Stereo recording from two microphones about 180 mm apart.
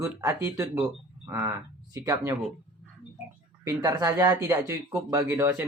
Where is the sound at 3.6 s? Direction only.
20° right (ahead or behind).